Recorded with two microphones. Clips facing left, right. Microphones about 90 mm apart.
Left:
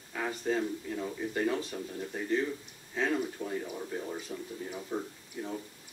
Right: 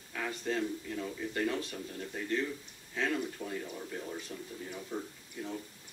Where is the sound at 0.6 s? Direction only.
15° left (ahead or behind).